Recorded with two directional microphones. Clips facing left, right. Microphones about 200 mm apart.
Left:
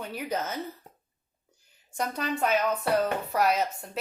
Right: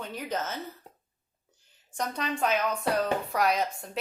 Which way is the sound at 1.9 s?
5° left (ahead or behind).